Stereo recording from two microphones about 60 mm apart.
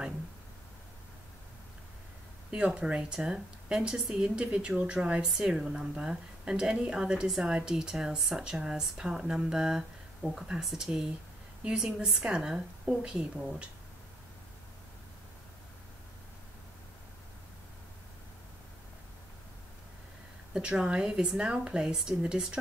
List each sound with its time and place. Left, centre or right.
2.5 s a woman's voice: centre
20.5 s a woman's voice: centre